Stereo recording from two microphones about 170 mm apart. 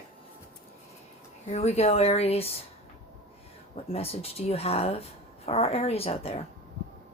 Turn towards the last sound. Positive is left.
turn(degrees=35)  # may be behind; listen again after turning